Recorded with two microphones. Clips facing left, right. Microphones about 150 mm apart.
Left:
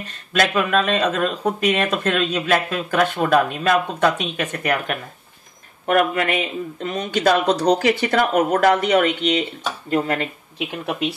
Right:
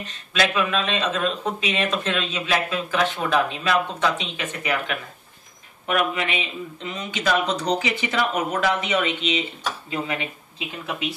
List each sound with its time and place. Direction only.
0.0 s speech: 50° left (ahead or behind)